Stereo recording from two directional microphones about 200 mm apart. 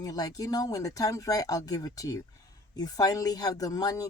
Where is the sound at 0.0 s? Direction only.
20° left (ahead or behind).